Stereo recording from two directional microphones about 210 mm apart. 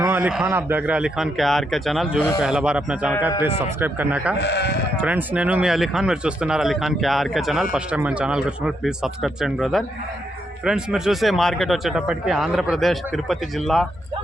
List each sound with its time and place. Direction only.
0.0 s a man's voice: 10° right (ahead or behind)
4.4 s speech: 55° left (ahead or behind)
5.0 s a man's voice: 5° right (ahead or behind)